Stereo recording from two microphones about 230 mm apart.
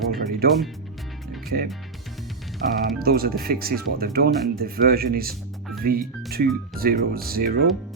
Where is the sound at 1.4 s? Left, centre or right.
Right.